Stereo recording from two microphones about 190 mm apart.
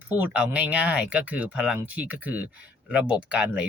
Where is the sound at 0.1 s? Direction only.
10° right (ahead or behind).